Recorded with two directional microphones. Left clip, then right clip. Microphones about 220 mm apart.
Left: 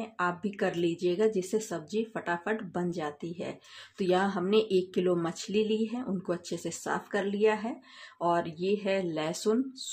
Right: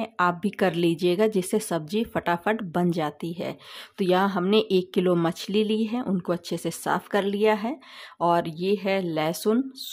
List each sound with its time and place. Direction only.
0.0 s a woman's voice: 25° right (ahead or behind)